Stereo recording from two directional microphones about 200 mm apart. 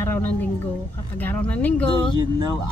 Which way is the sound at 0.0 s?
15° left (ahead or behind).